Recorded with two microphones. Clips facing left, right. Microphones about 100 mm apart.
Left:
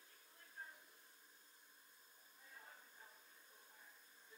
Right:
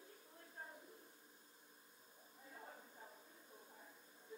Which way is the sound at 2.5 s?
30° right (ahead or behind).